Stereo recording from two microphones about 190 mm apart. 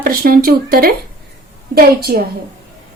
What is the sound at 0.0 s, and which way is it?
Speech, 50° right (ahead or behind).